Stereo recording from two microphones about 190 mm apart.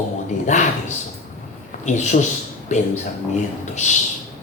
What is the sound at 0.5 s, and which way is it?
Speech, 35° left (ahead or behind).